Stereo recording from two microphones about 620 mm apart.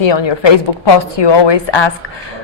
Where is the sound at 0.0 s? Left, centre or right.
Left.